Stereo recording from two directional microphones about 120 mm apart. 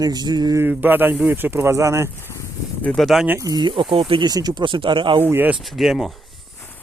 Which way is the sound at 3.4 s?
35° right (ahead or behind).